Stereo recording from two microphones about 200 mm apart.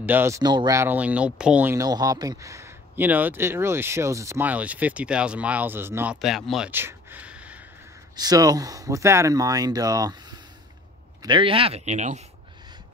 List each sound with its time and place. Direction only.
0.0 s speech: 10° right (ahead or behind)
6.2 s a sound: centre (ahead or behind)
8.2 s speech: 20° right (ahead or behind); by 12.3 s 35° right (ahead or behind)